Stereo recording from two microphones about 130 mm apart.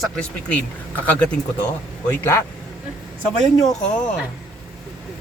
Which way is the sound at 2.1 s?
20° left (ahead or behind).